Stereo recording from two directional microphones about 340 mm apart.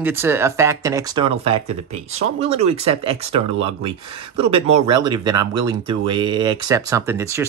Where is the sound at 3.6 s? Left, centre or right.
Centre.